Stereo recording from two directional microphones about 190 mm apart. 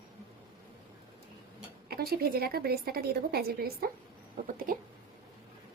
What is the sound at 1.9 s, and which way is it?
A woman's voice, 55° right (ahead or behind).